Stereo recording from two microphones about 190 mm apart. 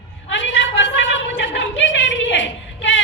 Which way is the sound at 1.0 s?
75° left (ahead or behind).